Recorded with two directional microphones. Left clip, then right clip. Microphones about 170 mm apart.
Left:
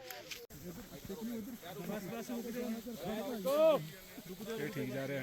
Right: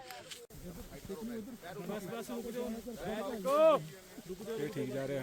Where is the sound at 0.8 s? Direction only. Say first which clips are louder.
Right 2 dB; 5° right (ahead or behind).